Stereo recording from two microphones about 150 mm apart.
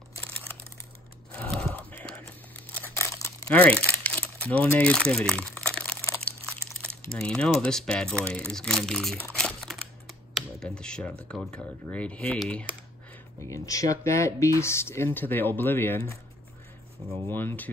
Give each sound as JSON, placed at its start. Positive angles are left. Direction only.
{"t": 1.3, "sound": "biting", "side_deg": 5}
{"t": 3.0, "sound": "crumpling", "side_deg": 20}
{"t": 3.4, "sound": "crumpling", "side_deg": 10}
{"t": 7.1, "sound": "speech", "side_deg": 5}
{"t": 9.3, "sound": "computer keyboard", "side_deg": 0}
{"t": 13.4, "sound": "speech", "side_deg": 20}
{"t": 17.3, "sound": "speech", "side_deg": 15}